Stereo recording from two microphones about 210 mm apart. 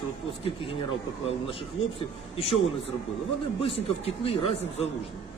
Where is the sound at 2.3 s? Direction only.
25° left (ahead or behind).